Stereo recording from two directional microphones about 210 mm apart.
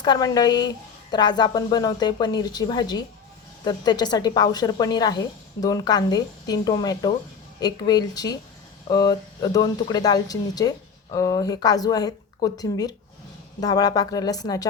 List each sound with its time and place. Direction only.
0.0 s speech: 20° left (ahead or behind)